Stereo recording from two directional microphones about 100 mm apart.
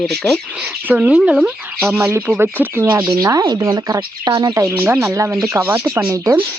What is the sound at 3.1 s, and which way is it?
Speech, 35° right (ahead or behind).